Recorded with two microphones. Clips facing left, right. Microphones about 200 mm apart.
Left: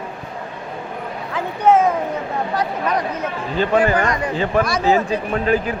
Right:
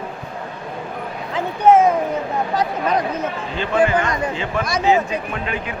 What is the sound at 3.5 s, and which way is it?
A man's voice, 40° left (ahead or behind).